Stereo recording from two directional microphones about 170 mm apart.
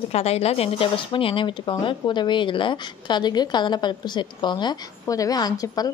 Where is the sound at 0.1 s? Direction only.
40° left (ahead or behind).